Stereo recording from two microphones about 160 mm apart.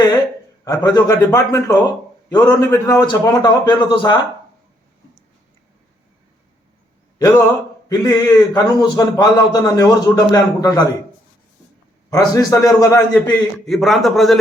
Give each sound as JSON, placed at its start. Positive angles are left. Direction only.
{"t": 0.6, "sound": "a man's voice", "side_deg": 20}
{"t": 7.2, "sound": "a man's voice", "side_deg": 20}
{"t": 12.1, "sound": "a man's voice", "side_deg": 20}